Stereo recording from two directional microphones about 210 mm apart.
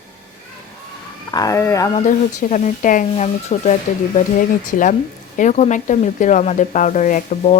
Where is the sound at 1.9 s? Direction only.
35° left (ahead or behind).